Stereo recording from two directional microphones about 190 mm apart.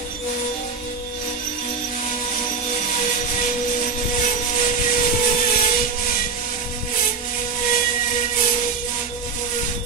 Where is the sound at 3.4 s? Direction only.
40° left (ahead or behind).